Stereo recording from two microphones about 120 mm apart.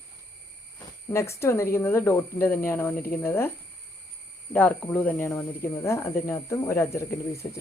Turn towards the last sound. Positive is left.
turn(degrees=20)  # may be behind; listen again after turning